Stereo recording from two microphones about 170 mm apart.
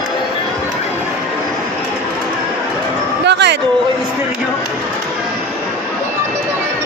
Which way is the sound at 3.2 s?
85° right.